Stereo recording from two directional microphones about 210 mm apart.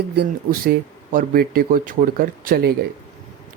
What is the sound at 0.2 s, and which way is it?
Speech, 45° right (ahead or behind).